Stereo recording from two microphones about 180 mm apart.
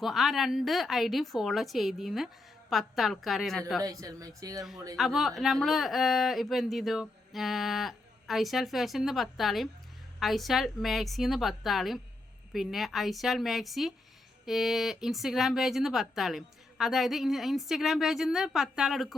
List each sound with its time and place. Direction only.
0.0 s speech: centre (ahead or behind)
3.8 s speech: 20° right (ahead or behind)
4.9 s speech: centre (ahead or behind)